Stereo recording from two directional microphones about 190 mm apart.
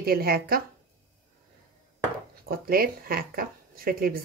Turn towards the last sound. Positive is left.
turn(degrees=-50)  # may be behind; listen again after turning